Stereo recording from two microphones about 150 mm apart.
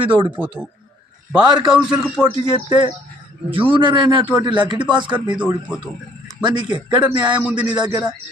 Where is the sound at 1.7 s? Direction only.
5° right (ahead or behind).